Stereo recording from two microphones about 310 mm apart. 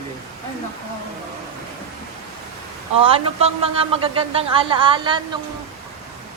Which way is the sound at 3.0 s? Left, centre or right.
Centre.